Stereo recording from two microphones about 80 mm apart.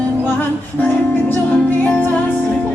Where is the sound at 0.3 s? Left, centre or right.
Left.